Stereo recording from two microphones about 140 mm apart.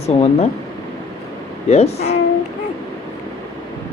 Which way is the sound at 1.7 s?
50° left (ahead or behind).